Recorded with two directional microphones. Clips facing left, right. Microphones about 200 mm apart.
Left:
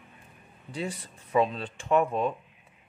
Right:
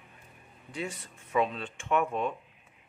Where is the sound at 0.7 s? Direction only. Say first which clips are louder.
Left 3 dB; 35° left (ahead or behind).